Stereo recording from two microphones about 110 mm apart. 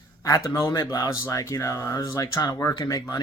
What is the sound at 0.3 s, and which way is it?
Speech, 30° left (ahead or behind).